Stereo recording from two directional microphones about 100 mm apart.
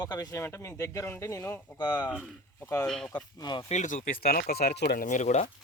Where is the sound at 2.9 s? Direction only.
5° left (ahead or behind).